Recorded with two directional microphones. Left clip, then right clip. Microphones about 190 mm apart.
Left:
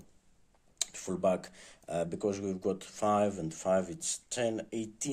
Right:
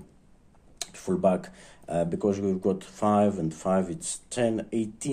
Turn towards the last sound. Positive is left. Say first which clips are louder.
# right 7 dB
turn(degrees=20)  # may be behind; listen again after turning